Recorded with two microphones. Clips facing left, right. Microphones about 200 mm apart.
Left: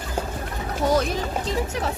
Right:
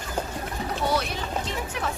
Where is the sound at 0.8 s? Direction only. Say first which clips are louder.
Left 6 dB; 45° left (ahead or behind).